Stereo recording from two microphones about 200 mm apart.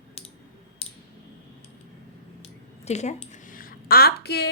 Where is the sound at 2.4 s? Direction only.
35° left (ahead or behind).